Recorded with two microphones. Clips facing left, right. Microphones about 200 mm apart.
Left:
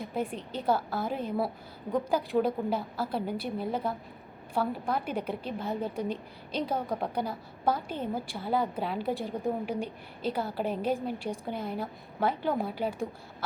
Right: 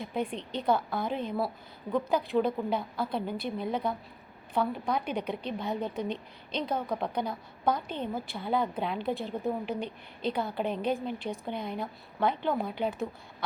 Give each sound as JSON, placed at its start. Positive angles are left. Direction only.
{"t": 0.0, "sound": "a woman's voice", "side_deg": 5}